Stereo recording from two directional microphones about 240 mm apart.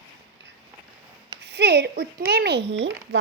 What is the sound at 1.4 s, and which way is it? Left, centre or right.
Speech, right.